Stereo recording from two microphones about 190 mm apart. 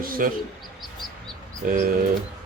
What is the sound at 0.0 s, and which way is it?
Speech, 50° right (ahead or behind).